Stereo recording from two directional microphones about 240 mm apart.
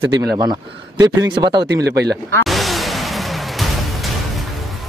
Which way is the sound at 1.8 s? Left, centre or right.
Right.